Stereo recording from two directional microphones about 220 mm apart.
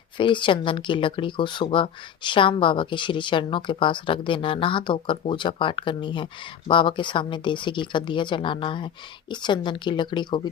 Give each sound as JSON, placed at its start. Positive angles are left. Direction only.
{"t": 0.2, "sound": "speech", "side_deg": 20}